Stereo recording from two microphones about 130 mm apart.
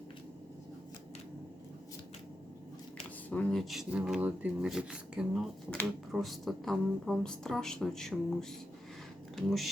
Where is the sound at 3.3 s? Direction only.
5° left (ahead or behind).